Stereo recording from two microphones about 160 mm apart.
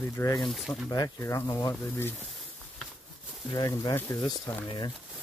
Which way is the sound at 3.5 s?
20° left (ahead or behind).